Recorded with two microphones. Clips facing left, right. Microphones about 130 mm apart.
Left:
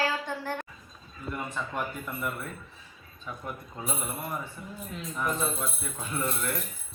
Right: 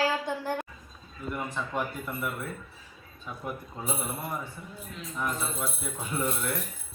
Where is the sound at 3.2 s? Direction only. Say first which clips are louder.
Right 1 dB; 5° right (ahead or behind).